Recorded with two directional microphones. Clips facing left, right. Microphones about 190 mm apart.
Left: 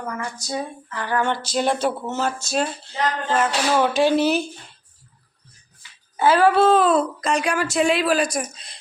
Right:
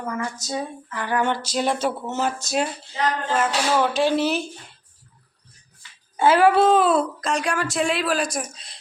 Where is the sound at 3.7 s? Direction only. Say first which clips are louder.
Left 3 dB; 5° left (ahead or behind).